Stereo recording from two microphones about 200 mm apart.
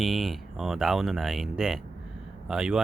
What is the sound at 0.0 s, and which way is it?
Speech, centre (ahead or behind).